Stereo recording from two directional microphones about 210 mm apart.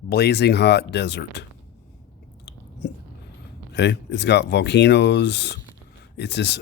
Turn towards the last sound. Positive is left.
turn(degrees=55)  # may be behind; listen again after turning